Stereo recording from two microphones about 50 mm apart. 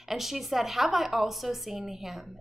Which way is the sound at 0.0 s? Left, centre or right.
Centre.